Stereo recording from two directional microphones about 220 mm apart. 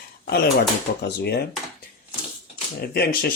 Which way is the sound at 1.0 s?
45° left (ahead or behind).